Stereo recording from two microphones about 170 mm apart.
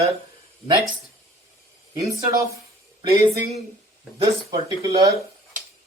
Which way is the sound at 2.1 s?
20° right (ahead or behind).